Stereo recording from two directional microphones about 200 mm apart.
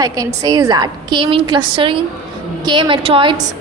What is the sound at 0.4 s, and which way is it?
A woman's voice, 20° right (ahead or behind).